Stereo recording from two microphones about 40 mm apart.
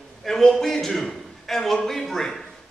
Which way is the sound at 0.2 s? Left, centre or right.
Centre.